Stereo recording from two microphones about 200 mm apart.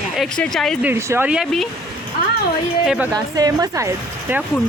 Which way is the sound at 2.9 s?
5° right (ahead or behind).